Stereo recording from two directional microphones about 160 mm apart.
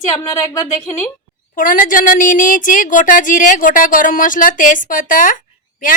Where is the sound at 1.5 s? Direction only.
55° left (ahead or behind).